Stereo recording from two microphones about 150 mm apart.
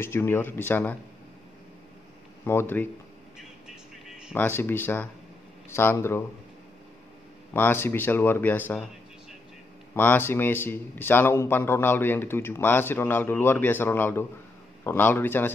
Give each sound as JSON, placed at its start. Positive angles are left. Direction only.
{"t": 0.0, "sound": "speech", "side_deg": 15}
{"t": 2.4, "sound": "speech", "side_deg": 15}
{"t": 4.3, "sound": "speech", "side_deg": 15}
{"t": 7.5, "sound": "speech", "side_deg": 15}
{"t": 9.9, "sound": "speech", "side_deg": 15}